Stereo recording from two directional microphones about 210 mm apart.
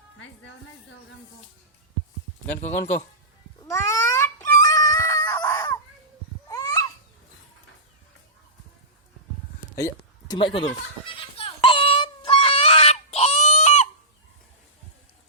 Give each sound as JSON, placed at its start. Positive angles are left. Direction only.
{"t": 0.2, "sound": "a woman's voice", "side_deg": 60}
{"t": 2.8, "sound": "speech", "side_deg": 35}
{"t": 3.7, "sound": "cat", "side_deg": 15}
{"t": 6.5, "sound": "babbling", "side_deg": 15}
{"t": 9.7, "sound": "a sound", "side_deg": 15}